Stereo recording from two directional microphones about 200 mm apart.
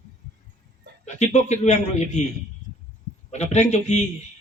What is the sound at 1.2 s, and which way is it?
Speech, 35° left (ahead or behind).